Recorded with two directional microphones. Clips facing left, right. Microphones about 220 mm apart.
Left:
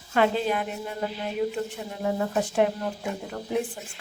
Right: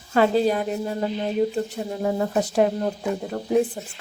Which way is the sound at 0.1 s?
35° right (ahead or behind).